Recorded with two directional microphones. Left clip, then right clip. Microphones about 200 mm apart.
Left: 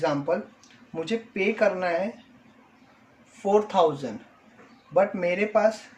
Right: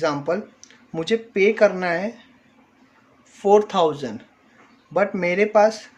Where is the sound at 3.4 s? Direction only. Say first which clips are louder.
Right 5 dB; 40° right (ahead or behind).